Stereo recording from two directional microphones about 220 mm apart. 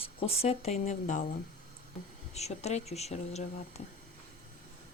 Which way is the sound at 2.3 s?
30° left (ahead or behind).